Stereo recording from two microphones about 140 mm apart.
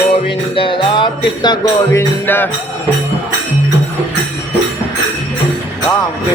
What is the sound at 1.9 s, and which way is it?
Music, 15° left (ahead or behind).